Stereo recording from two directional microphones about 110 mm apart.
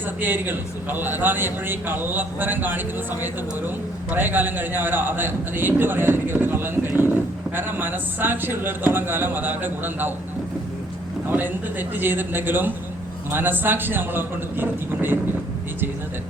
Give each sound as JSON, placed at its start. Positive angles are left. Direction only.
{"t": 0.2, "sound": "a man's voice", "side_deg": -20}
{"t": 11.3, "sound": "a man's voice", "side_deg": -15}